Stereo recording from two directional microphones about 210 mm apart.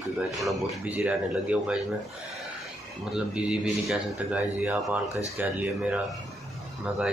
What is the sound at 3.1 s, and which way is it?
Speech, 5° right (ahead or behind).